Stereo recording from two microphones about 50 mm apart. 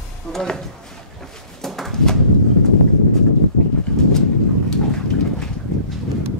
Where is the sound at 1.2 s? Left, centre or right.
Centre.